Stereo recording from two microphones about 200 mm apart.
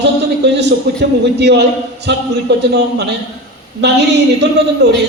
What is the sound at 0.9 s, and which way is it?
A man's voice, 60° right (ahead or behind).